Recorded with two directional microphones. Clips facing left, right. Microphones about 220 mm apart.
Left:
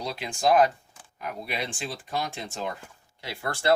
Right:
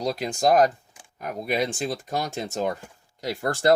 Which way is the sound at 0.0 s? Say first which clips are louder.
Right 4 dB; 40° right (ahead or behind).